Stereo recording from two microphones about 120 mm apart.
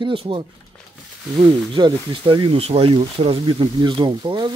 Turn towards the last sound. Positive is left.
turn(degrees=-40)  # may be behind; listen again after turning